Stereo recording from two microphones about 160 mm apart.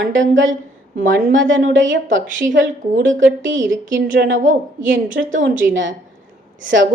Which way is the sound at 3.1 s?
55° right (ahead or behind).